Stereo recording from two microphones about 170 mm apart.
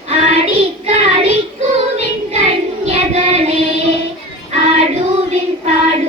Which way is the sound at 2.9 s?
40° right (ahead or behind).